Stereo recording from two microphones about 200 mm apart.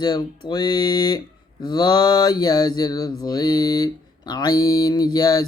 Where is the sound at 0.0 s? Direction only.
20° left (ahead or behind).